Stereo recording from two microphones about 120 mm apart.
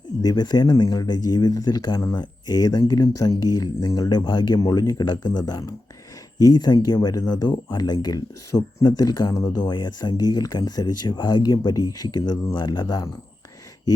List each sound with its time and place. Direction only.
0.2 s speech: 35° left (ahead or behind)